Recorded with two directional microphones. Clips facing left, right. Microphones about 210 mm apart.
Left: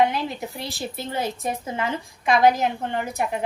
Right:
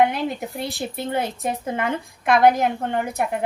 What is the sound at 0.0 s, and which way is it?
A woman's voice, 55° right (ahead or behind).